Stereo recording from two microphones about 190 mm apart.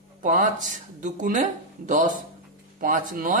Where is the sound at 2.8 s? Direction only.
45° right (ahead or behind).